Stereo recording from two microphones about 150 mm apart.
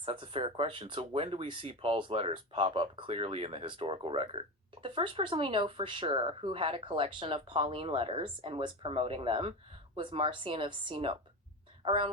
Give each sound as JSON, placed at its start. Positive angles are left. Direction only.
{"t": 0.0, "sound": "speech", "side_deg": -35}